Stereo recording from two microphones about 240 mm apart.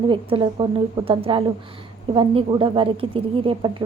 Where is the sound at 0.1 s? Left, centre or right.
Right.